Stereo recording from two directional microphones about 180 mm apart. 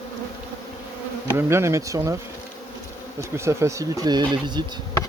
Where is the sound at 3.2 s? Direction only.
15° right (ahead or behind).